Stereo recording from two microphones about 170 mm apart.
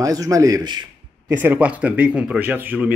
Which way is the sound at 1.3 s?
10° right (ahead or behind).